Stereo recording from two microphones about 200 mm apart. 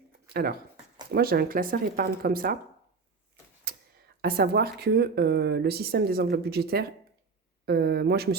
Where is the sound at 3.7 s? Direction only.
50° right (ahead or behind).